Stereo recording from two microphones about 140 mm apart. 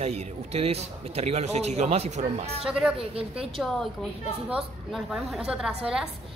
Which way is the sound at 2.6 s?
5° right (ahead or behind).